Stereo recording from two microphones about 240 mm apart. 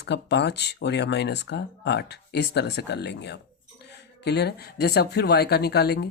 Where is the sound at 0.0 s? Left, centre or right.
Left.